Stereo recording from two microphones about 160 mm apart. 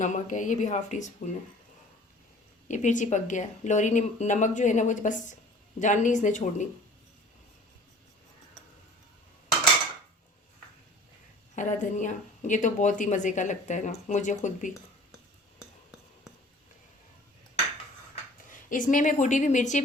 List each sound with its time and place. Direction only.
0.0 s speech: 50° left (ahead or behind)
2.6 s speech: 50° left (ahead or behind)
11.5 s speech: 50° left (ahead or behind)
18.1 s speech: 55° left (ahead or behind)